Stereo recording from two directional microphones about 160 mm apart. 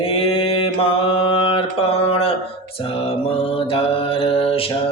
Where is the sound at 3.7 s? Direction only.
35° left (ahead or behind).